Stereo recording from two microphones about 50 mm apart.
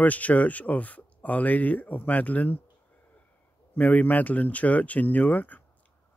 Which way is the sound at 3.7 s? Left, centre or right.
Left.